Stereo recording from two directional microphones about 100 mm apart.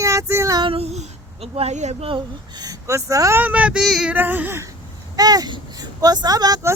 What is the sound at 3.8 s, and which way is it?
Female singing, centre (ahead or behind).